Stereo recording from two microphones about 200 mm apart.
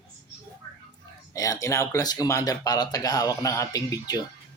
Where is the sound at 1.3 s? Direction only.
15° left (ahead or behind).